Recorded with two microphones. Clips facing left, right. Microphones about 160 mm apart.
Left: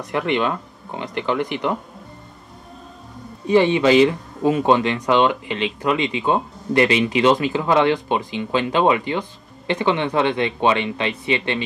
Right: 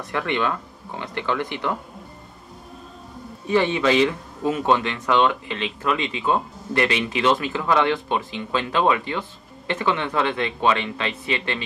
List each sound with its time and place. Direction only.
0.0 s speech: 20° left (ahead or behind)
3.4 s speech: 20° left (ahead or behind)